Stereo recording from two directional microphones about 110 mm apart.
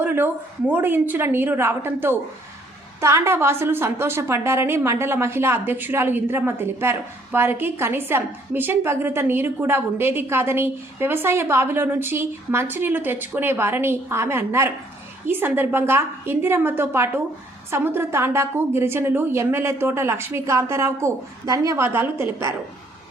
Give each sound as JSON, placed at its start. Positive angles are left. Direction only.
{"t": 0.0, "sound": "a sound", "side_deg": -20}
{"t": 0.7, "sound": "a woman's voice", "side_deg": -20}
{"t": 21.9, "sound": "a woman's voice", "side_deg": -20}